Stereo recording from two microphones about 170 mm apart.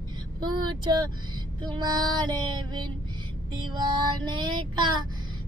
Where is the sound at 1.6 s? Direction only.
25° right (ahead or behind).